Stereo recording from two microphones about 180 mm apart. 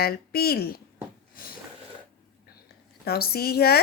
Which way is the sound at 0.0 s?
60° left (ahead or behind).